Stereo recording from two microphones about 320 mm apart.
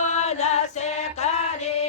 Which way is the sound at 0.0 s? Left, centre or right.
Left.